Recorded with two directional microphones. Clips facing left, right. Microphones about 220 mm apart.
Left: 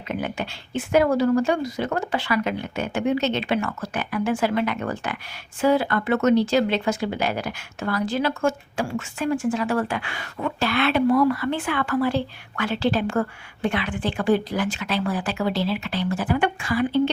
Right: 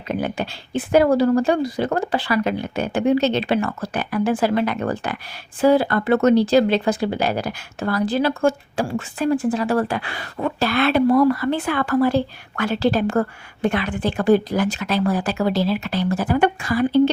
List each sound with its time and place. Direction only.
0.1 s speech: 35° right (ahead or behind)